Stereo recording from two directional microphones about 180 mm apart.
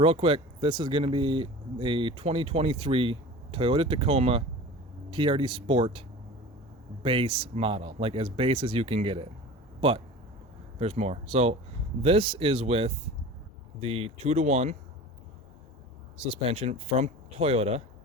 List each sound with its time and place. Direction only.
0.0 s speech: 30° right (ahead or behind)
10.8 s speech: 35° right (ahead or behind)
16.2 s speech: 30° right (ahead or behind)